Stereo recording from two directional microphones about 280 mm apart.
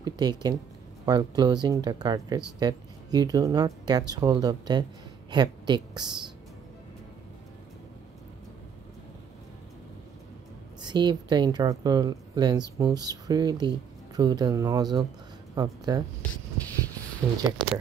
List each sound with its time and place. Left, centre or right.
0.0 s a woman's voice: centre
10.8 s speech: centre
17.2 s speech: centre